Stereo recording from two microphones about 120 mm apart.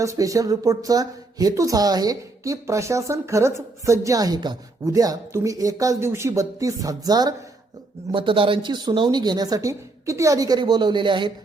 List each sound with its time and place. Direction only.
0.0 s a woman's voice: 25° right (ahead or behind)
8.1 s speech: 45° right (ahead or behind)